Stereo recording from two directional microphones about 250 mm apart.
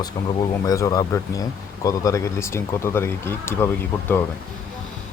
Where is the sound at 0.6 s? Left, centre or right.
Centre.